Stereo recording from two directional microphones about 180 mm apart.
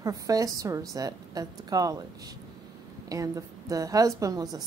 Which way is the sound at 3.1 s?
20° right (ahead or behind).